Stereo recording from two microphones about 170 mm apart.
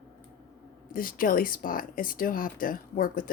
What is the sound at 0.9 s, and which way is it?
Speech, 55° left (ahead or behind).